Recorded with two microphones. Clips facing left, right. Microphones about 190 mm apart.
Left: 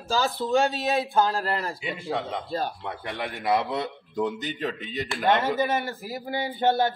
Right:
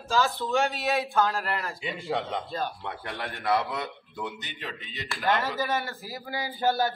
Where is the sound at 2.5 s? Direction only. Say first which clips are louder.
Left 3 dB; 40° left (ahead or behind).